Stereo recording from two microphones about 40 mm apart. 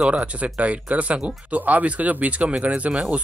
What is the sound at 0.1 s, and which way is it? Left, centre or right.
Speech, right.